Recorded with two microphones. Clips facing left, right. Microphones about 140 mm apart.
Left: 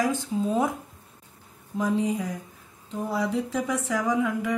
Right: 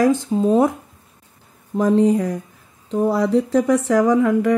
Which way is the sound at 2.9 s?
80° right.